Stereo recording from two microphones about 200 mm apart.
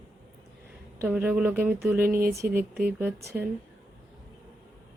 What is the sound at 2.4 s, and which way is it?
Speech, 45° right (ahead or behind).